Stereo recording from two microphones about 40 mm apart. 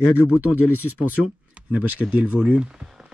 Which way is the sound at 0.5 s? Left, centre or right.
Right.